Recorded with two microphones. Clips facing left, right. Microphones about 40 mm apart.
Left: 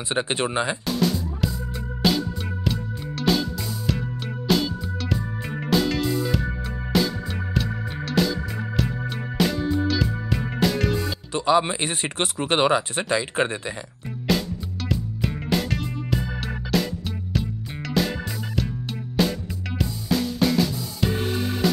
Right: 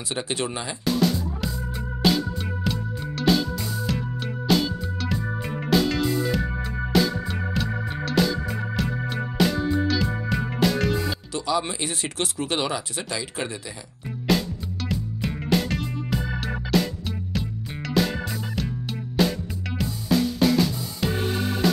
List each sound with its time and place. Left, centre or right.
0.1 s speech: left
0.8 s music: centre
11.3 s speech: left
14.3 s music: centre
17.8 s music: centre
19.2 s music: centre